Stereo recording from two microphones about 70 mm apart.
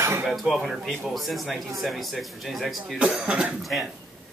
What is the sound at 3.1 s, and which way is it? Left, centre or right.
Speech, centre.